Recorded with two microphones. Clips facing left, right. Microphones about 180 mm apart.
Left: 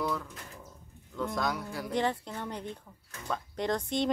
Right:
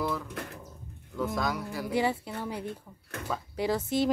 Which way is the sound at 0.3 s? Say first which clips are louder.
Right 9 dB; 65° right (ahead or behind).